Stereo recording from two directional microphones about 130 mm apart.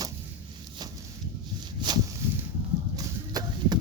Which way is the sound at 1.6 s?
35° right (ahead or behind).